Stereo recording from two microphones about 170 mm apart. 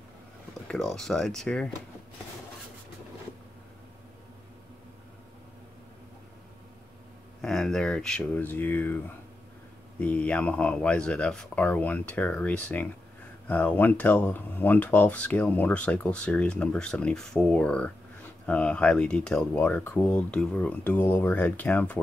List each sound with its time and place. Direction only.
0.7 s speech: 5° left (ahead or behind)
7.4 s speech: 5° left (ahead or behind)